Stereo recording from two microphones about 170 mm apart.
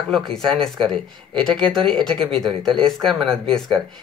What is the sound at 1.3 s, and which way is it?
Speech, 30° right (ahead or behind).